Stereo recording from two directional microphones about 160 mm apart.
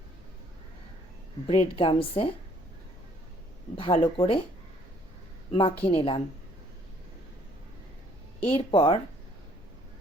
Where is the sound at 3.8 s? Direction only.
35° left (ahead or behind).